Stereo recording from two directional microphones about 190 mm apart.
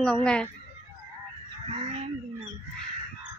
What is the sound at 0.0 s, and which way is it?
Speech, 5° left (ahead or behind).